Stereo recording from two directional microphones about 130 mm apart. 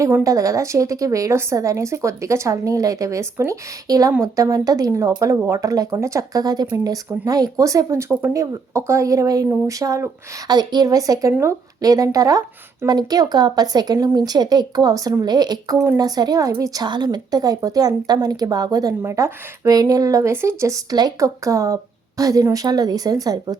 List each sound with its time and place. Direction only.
0.0 s a woman's voice: 25° right (ahead or behind)